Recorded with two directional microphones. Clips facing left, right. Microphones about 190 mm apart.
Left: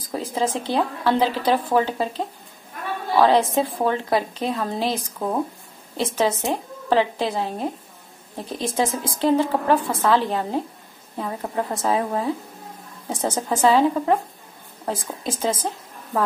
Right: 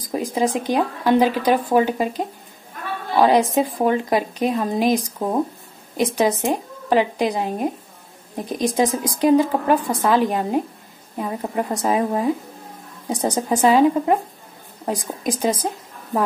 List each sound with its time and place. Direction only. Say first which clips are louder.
0.0 s a woman's voice: right 3 dB; 15° right (ahead or behind)